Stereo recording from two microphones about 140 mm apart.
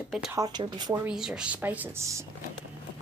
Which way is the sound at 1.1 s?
5° right (ahead or behind).